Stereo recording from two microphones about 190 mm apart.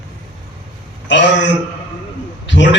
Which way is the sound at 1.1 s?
70° left (ahead or behind).